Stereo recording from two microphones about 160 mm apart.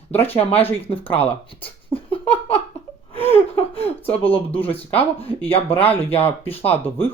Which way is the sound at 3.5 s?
35° left (ahead or behind).